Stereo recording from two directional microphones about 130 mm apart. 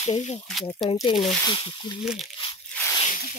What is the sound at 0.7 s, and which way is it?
Speech, 40° left (ahead or behind).